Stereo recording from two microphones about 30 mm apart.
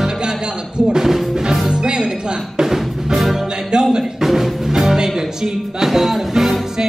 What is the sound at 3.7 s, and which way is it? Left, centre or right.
Music, right.